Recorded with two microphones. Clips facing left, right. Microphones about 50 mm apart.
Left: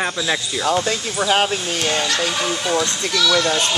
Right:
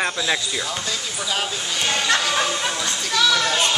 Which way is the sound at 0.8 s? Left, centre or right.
Left.